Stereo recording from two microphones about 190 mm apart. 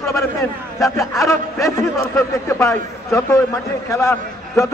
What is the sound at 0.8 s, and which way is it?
A man's voice, 15° left (ahead or behind).